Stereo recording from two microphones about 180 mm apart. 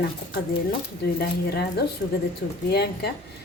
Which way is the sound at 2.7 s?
65° left (ahead or behind).